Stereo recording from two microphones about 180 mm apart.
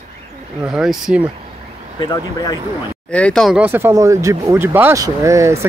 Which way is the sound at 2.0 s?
20° left (ahead or behind).